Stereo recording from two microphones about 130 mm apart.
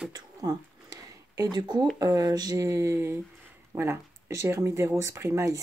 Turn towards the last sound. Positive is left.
turn(degrees=-25)  # may be behind; listen again after turning